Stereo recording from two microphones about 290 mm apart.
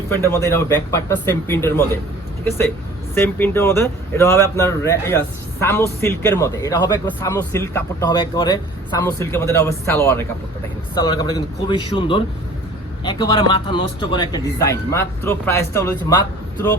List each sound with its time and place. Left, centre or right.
0.1 s speech: centre
3.2 s speech: centre